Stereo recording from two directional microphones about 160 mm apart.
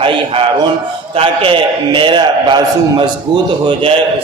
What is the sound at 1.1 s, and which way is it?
A man's voice, 35° right (ahead or behind).